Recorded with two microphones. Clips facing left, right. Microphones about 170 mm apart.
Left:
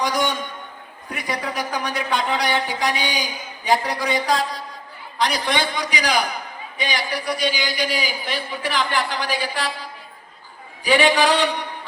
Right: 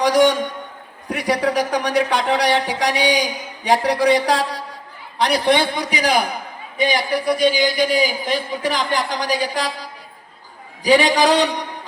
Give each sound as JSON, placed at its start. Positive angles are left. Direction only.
{"t": 0.0, "sound": "speech", "side_deg": -75}
{"t": 5.1, "sound": "a man's voice", "side_deg": -60}
{"t": 10.8, "sound": "a sound", "side_deg": -35}